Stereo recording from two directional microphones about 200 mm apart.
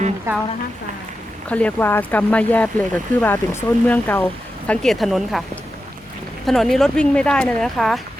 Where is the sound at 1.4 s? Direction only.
5° left (ahead or behind).